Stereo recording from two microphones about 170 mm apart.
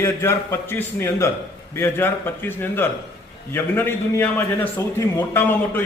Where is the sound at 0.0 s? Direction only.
15° left (ahead or behind).